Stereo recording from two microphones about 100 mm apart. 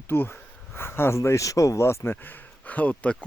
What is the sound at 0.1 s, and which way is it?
Speech, 20° left (ahead or behind).